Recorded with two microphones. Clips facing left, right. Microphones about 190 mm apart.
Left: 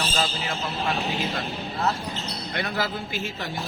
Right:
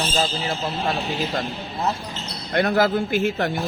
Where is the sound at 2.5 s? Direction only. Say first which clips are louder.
Right 10 dB; 50° right (ahead or behind).